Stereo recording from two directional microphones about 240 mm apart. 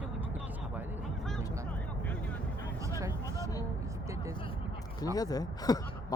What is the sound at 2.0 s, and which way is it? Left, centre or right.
Vehicle, centre.